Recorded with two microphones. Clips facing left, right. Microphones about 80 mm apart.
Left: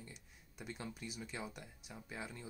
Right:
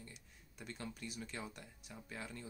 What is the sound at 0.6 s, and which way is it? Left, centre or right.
Speech, centre.